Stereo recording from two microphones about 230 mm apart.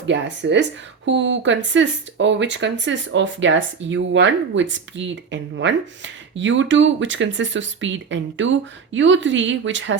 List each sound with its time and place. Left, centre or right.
0.0 s speech: right